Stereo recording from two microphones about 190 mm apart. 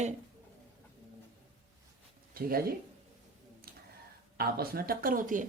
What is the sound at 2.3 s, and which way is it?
Speech, 50° right (ahead or behind).